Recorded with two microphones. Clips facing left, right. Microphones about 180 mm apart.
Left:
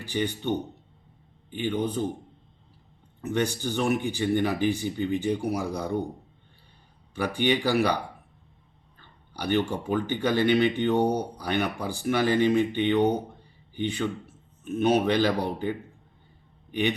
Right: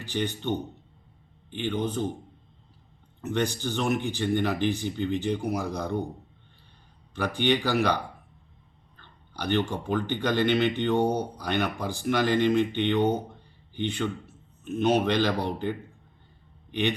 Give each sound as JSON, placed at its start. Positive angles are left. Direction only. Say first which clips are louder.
{"t": 0.0, "sound": "speech", "louder": "left 1 dB", "side_deg": 10}
{"t": 3.2, "sound": "speech", "louder": "left 1 dB", "side_deg": 10}
{"t": 7.1, "sound": "speech", "louder": "even", "side_deg": 10}